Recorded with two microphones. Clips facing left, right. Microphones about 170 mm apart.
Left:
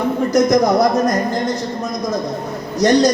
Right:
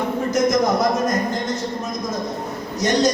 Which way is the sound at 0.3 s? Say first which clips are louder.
Left 5 dB; 35° left (ahead or behind).